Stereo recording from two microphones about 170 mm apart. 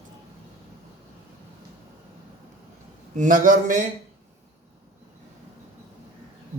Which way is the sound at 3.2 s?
50° right (ahead or behind).